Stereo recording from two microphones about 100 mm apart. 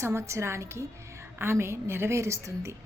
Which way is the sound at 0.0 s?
25° right (ahead or behind).